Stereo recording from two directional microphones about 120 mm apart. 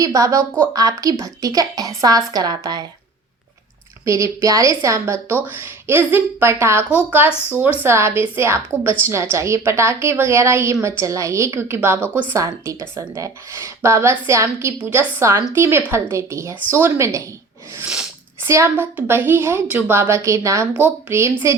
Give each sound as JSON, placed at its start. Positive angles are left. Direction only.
{"t": 0.0, "sound": "a woman's voice", "side_deg": -30}
{"t": 4.0, "sound": "a woman's voice", "side_deg": -25}
{"t": 14.8, "sound": "a woman's voice", "side_deg": -10}
{"t": 18.4, "sound": "a woman's voice", "side_deg": -25}